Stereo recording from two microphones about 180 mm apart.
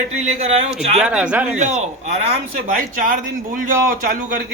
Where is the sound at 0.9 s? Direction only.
5° right (ahead or behind).